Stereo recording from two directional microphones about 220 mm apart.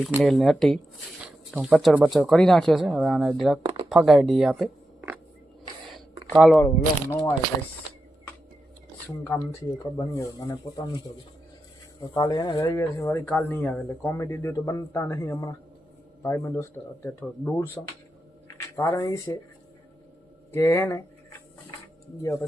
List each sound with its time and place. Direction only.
0.2 s speech: centre (ahead or behind)
6.3 s speech: 5° right (ahead or behind)
6.6 s speech: 10° left (ahead or behind)
9.2 s speech: 10° left (ahead or behind)
12.1 s speech: 15° left (ahead or behind)
20.5 s speech: 10° left (ahead or behind)
22.2 s speech: 15° left (ahead or behind)